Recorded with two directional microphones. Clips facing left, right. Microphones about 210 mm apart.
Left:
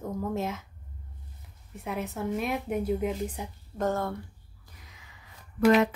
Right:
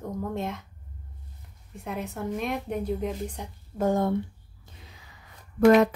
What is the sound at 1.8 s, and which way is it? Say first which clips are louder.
A woman's voice: even; centre (ahead or behind).